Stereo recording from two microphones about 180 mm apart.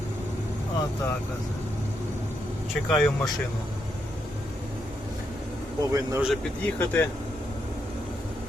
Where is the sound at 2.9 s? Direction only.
Centre (ahead or behind).